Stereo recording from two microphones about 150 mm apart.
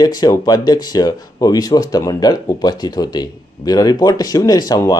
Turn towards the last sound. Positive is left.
turn(degrees=25)  # may be behind; listen again after turning